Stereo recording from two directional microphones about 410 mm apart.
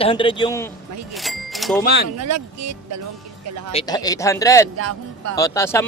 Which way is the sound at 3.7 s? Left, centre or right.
Centre.